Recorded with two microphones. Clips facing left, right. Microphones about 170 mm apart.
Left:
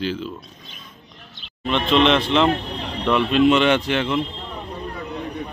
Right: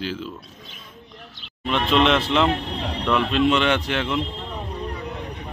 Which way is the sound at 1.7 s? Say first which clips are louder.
Left 2 dB; 5° right (ahead or behind).